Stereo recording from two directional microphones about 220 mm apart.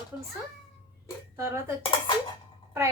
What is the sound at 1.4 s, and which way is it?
Speech, 10° right (ahead or behind).